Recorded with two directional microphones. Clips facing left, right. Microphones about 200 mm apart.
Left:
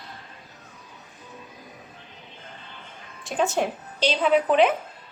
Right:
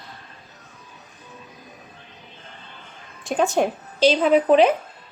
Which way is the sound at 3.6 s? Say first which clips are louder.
Right 6 dB; 45° right (ahead or behind).